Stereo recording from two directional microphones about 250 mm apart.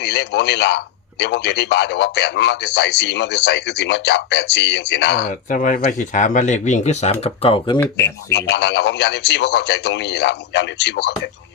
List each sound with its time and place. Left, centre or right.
0.0 s a man's voice: left
7.8 s speech: centre
8.3 s a man's voice: left